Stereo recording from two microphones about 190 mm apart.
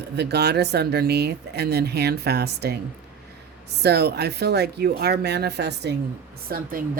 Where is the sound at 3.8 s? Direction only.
60° right (ahead or behind).